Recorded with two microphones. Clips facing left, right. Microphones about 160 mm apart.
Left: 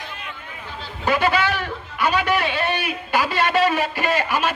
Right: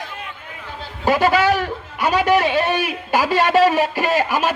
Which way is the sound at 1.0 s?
40° right (ahead or behind).